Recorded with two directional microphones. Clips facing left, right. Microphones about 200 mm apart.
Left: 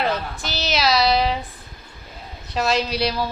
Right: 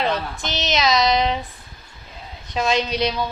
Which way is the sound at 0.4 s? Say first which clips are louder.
Right 1 dB; 5° left (ahead or behind).